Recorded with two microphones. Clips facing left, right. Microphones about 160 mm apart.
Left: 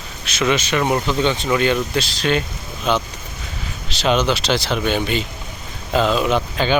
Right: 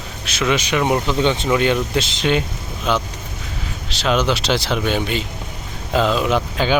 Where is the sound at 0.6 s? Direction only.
15° right (ahead or behind).